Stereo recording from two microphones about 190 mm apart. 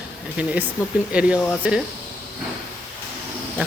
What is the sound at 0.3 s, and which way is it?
Speech, 5° right (ahead or behind).